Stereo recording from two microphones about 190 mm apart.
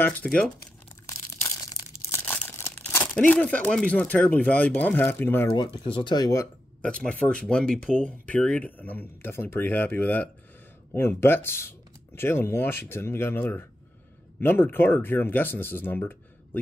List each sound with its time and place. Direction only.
0.0 s speech: 5° left (ahead or behind)
2.0 s speech: 10° left (ahead or behind)
5.9 s speech: 25° left (ahead or behind); by 16.2 s 10° left (ahead or behind)